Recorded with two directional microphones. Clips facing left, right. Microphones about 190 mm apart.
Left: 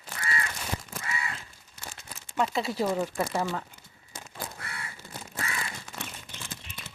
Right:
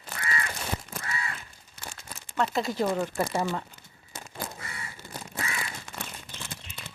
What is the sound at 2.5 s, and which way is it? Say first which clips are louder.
Speech: right 2 dB; 5° left (ahead or behind).